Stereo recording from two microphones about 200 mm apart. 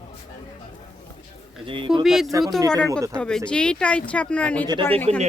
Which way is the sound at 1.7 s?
25° right (ahead or behind).